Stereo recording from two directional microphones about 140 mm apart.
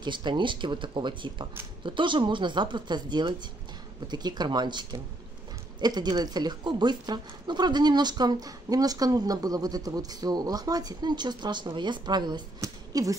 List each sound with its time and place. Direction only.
0.0 s speech: 35° right (ahead or behind)